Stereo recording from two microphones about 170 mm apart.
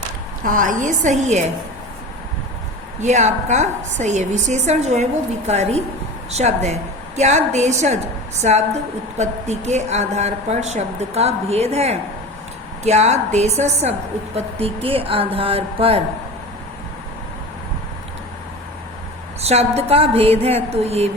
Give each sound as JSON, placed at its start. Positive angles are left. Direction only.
{"t": 0.4, "sound": "a woman's voice", "side_deg": -50}
{"t": 3.0, "sound": "a woman's voice", "side_deg": -45}
{"t": 19.4, "sound": "a woman's voice", "side_deg": -40}